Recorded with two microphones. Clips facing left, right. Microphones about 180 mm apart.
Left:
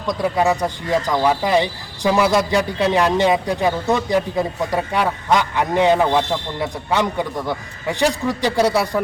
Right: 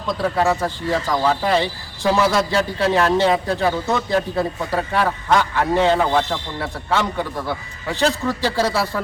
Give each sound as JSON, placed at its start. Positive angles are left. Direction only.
{"t": 0.1, "sound": "speech", "side_deg": 15}